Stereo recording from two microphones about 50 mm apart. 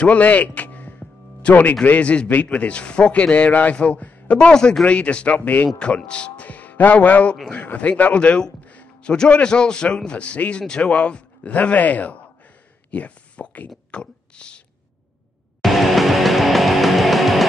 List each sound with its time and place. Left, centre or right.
0.0 s music: left
1.9 s a man's voice: left
8.6 s a sound: left
9.1 s a man's voice: centre
12.9 s a sound: left
15.6 s music: centre